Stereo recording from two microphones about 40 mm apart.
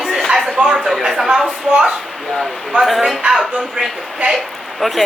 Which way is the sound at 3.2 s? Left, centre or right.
Right.